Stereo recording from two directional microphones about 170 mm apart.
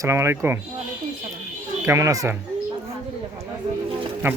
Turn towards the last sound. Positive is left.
turn(degrees=-15)  # may be behind; listen again after turning